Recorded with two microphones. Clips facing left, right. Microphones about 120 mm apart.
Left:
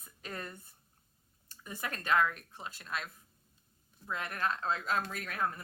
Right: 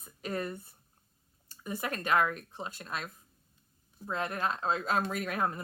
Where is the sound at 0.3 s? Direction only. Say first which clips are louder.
Right 9 dB; 15° right (ahead or behind).